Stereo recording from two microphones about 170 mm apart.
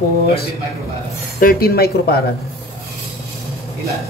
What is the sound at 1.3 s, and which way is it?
Speech, 60° left (ahead or behind).